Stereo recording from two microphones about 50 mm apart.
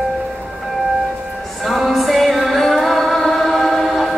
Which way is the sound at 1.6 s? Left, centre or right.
Centre.